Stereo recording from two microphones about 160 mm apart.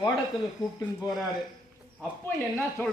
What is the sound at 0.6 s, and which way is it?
Speech, 20° left (ahead or behind).